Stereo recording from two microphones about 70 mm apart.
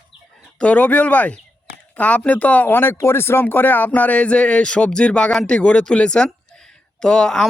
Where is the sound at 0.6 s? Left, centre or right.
Centre.